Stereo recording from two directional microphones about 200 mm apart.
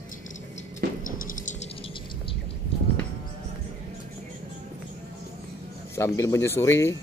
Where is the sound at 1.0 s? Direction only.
40° left (ahead or behind).